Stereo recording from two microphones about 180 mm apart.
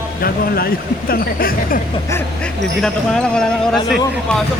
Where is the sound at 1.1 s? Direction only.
55° left (ahead or behind).